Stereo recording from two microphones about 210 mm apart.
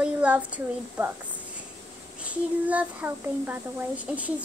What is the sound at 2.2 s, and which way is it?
A child's voice, 5° right (ahead or behind).